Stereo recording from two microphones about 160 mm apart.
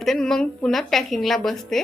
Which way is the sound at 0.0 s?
Centre (ahead or behind).